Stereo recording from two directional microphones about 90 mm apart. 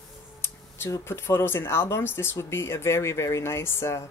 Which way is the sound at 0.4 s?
25° left (ahead or behind).